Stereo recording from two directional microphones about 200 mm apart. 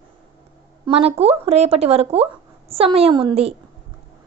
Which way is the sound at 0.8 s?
30° right (ahead or behind).